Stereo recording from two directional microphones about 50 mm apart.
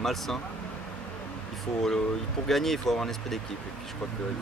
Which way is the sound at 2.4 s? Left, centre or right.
Centre.